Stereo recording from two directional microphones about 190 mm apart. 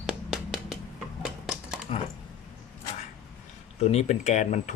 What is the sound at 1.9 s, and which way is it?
Speech, 35° left (ahead or behind).